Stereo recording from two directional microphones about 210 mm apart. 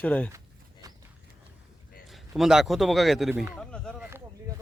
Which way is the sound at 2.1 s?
Centre (ahead or behind).